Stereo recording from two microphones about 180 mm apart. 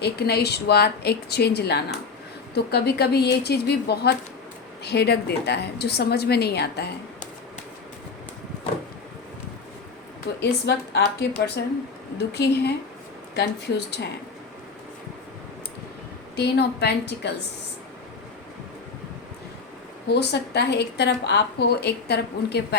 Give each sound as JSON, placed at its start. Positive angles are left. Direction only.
{"t": 0.0, "sound": "a woman's voice", "side_deg": 65}
{"t": 10.4, "sound": "a woman's voice", "side_deg": 65}
{"t": 16.3, "sound": "a woman's voice", "side_deg": 65}
{"t": 20.1, "sound": "a woman's voice", "side_deg": 70}